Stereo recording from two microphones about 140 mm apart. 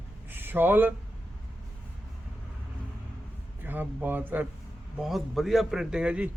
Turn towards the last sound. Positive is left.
turn(degrees=-10)  # may be behind; listen again after turning